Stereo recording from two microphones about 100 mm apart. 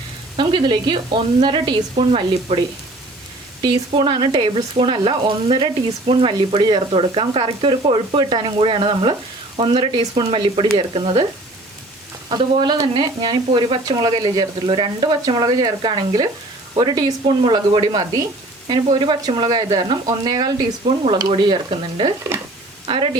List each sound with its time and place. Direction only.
0.3 s speech: 50° right (ahead or behind)
2.0 s speech: 80° right
3.9 s speech: 50° right (ahead or behind); by 6.6 s 65° right (ahead or behind)
6.6 s speech: 50° right (ahead or behind)
12.4 s speech: 50° right (ahead or behind)
13.8 s speech: 45° right (ahead or behind)